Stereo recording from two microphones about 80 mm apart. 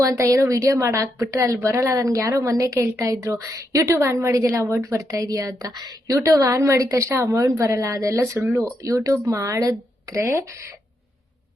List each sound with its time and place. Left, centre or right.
0.0 s a woman's voice: right